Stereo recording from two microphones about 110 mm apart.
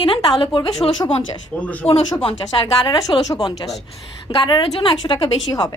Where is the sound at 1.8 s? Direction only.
20° left (ahead or behind).